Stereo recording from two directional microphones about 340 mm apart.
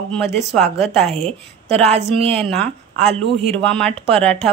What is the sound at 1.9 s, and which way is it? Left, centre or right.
Speech, centre.